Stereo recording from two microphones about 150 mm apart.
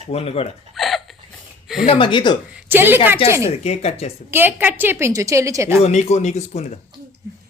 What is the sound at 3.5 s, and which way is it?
Speech, 45° left (ahead or behind).